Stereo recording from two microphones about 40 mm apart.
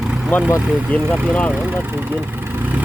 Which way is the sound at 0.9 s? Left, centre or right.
Left.